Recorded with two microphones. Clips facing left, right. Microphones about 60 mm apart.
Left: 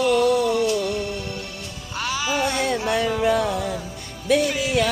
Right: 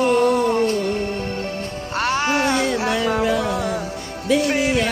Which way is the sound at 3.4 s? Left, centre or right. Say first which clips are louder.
Right 2 dB; right.